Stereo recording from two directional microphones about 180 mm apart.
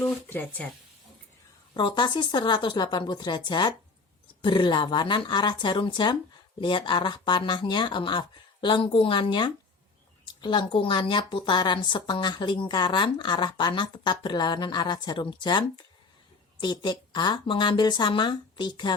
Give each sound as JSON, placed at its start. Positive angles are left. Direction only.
{"t": 0.0, "sound": "speech", "side_deg": 10}
{"t": 1.7, "sound": "a woman's voice", "side_deg": 25}